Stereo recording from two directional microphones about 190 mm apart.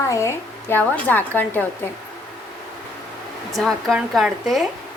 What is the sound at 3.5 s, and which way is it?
Speech, centre (ahead or behind).